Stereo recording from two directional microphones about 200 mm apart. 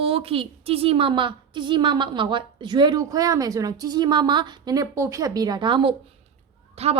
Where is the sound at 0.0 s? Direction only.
30° right (ahead or behind).